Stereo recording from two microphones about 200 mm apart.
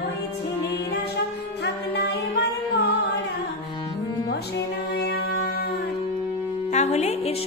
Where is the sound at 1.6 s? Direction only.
55° left (ahead or behind).